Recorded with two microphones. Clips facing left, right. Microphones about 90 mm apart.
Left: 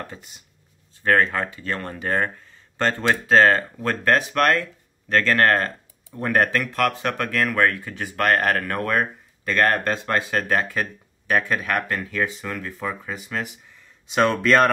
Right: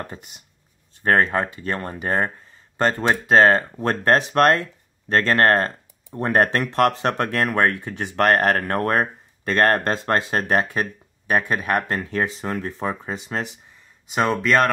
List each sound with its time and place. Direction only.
1.3 s speech: 25° right (ahead or behind)
14.4 s speech: 5° right (ahead or behind)